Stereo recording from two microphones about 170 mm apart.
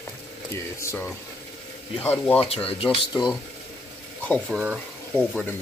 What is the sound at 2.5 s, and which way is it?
Speech, 35° left (ahead or behind).